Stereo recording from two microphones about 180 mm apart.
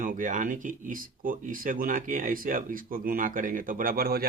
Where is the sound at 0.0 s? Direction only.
45° right (ahead or behind).